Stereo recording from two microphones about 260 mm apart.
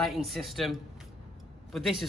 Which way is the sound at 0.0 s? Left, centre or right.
Centre.